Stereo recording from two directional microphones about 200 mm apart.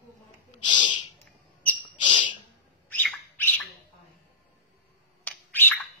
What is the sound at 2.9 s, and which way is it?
Bird, 5° left (ahead or behind).